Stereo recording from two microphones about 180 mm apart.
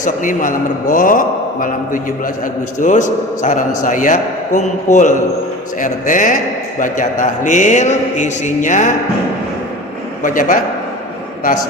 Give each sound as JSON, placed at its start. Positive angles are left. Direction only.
{"t": 0.0, "sound": "a man's voice", "side_deg": 45}
{"t": 10.2, "sound": "a man's voice", "side_deg": 45}